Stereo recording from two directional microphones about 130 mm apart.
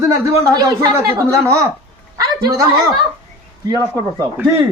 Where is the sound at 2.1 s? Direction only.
25° right (ahead or behind).